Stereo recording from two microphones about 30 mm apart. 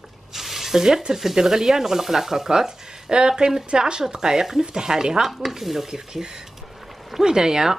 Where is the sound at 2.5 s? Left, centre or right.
Centre.